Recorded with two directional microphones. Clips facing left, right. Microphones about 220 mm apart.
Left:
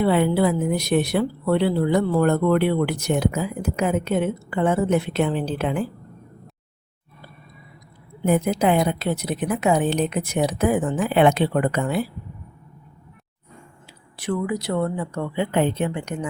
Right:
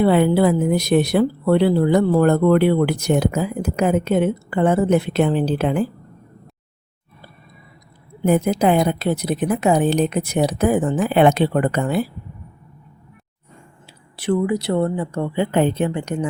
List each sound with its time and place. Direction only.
0.0 s speech: 40° right (ahead or behind)
8.3 s speech: 40° right (ahead or behind)
14.2 s speech: 30° right (ahead or behind)